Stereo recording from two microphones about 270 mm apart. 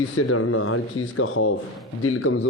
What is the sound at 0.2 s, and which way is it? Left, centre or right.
A man's voice, left.